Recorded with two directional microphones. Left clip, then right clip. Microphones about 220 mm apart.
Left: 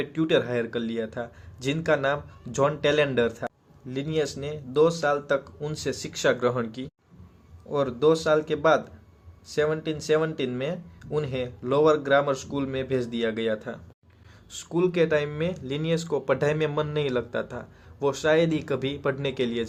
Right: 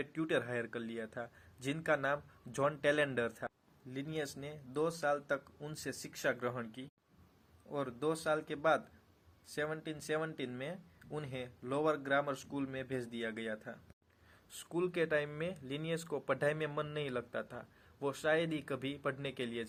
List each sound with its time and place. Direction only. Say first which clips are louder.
0.0 s speech: left 12 dB; 20° right (ahead or behind)